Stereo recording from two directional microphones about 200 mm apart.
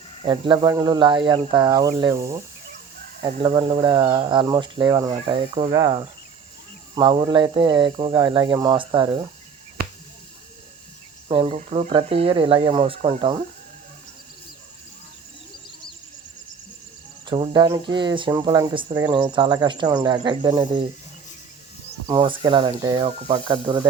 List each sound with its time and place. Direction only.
0.2 s speech: 25° right (ahead or behind)
3.2 s speech: 25° right (ahead or behind)
11.3 s speech: 30° right (ahead or behind)
17.2 s speech: 25° right (ahead or behind)
22.0 s speech: 20° right (ahead or behind)